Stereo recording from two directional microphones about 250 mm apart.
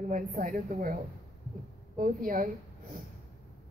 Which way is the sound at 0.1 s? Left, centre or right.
Right.